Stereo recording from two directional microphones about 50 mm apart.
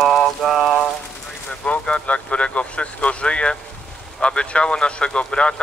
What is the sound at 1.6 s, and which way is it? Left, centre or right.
Speech, left.